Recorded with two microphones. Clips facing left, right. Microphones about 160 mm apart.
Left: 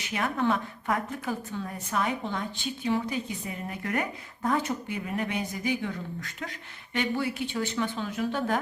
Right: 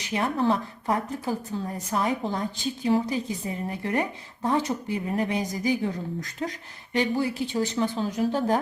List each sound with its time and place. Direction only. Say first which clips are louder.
0.1 s speech: right 3 dB; 30° right (ahead or behind)